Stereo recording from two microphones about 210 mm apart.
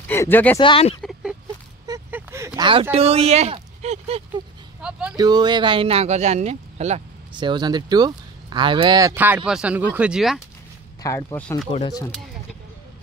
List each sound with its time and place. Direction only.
0.1 s speech: 10° left (ahead or behind)
0.6 s speech: 25° left (ahead or behind)
1.9 s a sound: 10° right (ahead or behind); by 4.2 s 30° right (ahead or behind)
5.1 s speech: 20° right (ahead or behind); by 10.4 s centre (ahead or behind)
11.0 s speech: 15° left (ahead or behind)
11.7 s speech: 25° left (ahead or behind)